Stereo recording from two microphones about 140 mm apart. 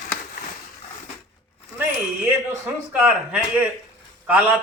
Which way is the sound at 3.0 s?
10° right (ahead or behind).